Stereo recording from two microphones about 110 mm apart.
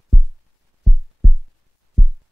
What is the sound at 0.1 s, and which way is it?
Heart sounds, centre (ahead or behind).